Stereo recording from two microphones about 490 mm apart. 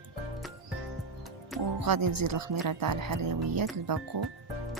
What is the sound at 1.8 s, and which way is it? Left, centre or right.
Music, right.